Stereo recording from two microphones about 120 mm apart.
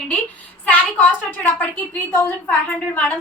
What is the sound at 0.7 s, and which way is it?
A woman's voice, 15° left (ahead or behind).